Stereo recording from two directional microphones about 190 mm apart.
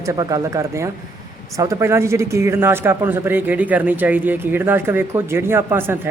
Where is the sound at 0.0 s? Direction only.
20° right (ahead or behind).